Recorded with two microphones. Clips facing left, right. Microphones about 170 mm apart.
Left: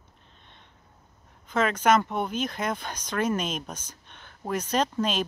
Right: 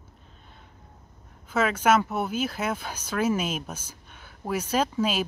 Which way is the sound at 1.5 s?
5° right (ahead or behind).